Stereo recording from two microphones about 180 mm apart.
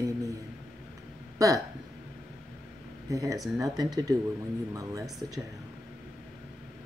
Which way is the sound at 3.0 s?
20° right (ahead or behind).